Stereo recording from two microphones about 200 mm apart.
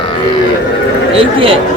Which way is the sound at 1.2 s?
25° right (ahead or behind).